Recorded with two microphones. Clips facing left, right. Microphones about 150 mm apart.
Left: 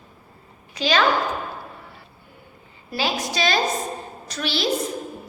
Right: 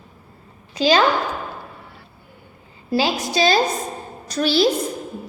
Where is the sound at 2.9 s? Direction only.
30° right (ahead or behind).